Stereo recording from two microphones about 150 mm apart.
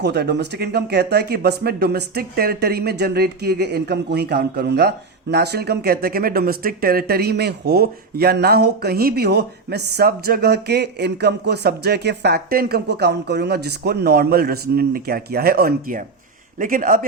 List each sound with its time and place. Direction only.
0.0 s speech: 90° right
16.6 s a man's voice: 65° right (ahead or behind)